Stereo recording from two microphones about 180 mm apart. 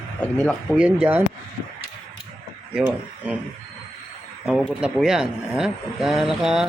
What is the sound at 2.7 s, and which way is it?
Speech, 5° right (ahead or behind).